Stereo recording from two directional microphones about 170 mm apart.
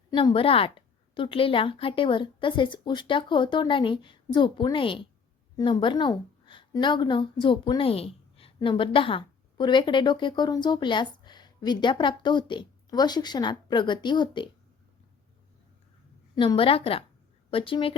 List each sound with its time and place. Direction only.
0.1 s a woman's voice: 30° left (ahead or behind)
16.3 s a woman's voice: 25° left (ahead or behind)